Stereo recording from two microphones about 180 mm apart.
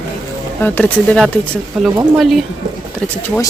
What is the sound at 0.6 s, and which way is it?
Speech, 10° left (ahead or behind).